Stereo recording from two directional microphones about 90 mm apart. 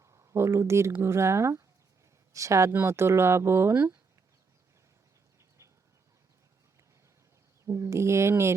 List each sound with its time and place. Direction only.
0.0 s speech: 30° right (ahead or behind)
7.6 s speech: 35° right (ahead or behind)